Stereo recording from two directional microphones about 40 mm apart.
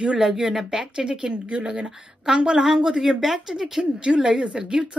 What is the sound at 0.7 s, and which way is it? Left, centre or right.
A woman's voice, centre.